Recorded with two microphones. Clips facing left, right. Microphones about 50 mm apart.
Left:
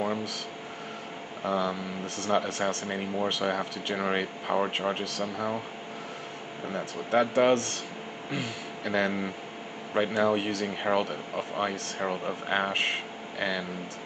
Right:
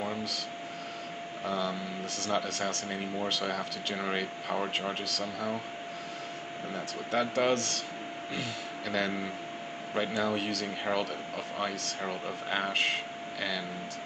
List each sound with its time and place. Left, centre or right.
0.0 s a sound: centre
1.6 s speech: centre
6.7 s speech: centre
7.2 s speech: centre